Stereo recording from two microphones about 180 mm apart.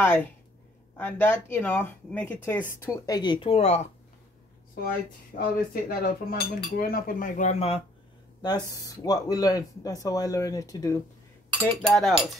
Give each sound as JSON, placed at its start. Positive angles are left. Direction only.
{"t": 0.0, "sound": "speech", "side_deg": 10}
{"t": 5.3, "sound": "speech", "side_deg": 55}
{"t": 5.7, "sound": "cutlery", "side_deg": 55}
{"t": 8.4, "sound": "speech", "side_deg": 25}
{"t": 11.6, "sound": "cutlery", "side_deg": 5}